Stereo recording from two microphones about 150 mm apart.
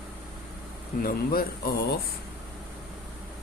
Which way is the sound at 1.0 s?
80° left.